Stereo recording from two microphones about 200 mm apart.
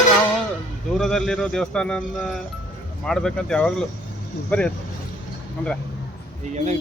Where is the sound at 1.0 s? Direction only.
Centre (ahead or behind).